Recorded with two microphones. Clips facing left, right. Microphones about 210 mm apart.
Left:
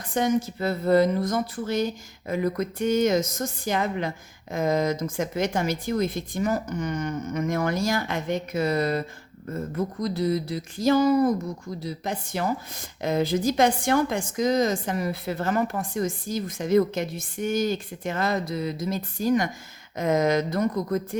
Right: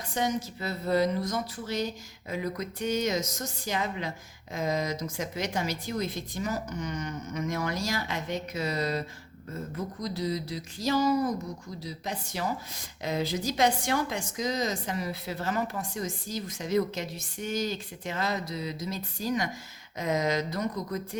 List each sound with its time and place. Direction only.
0.1 s speech: 55° left (ahead or behind)
9.5 s a sound: 55° left (ahead or behind)
11.8 s speech: 55° left (ahead or behind)